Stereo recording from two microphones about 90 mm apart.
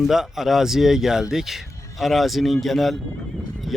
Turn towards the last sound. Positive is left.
turn(degrees=0)  # may be behind; listen again after turning